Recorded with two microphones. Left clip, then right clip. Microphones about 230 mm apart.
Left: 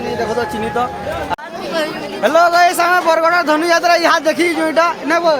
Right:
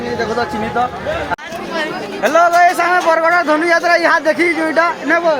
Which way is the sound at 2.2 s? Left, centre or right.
Centre.